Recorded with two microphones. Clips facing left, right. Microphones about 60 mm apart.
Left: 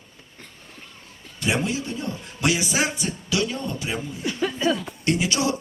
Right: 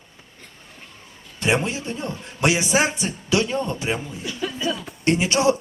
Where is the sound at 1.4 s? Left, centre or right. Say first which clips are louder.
Right 2 dB; right.